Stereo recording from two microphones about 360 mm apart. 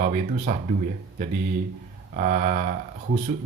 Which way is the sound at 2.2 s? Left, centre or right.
Right.